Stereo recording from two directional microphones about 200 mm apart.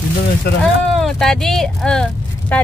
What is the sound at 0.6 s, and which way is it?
Speech, centre (ahead or behind).